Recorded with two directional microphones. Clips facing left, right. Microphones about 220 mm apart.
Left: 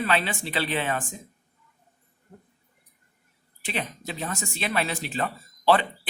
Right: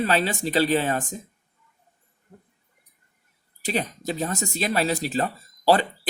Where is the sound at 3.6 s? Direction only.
40° right (ahead or behind).